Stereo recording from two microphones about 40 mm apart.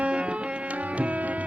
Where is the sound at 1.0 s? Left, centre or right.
Right.